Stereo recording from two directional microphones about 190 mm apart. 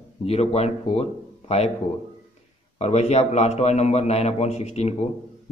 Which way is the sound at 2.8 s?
35° left (ahead or behind).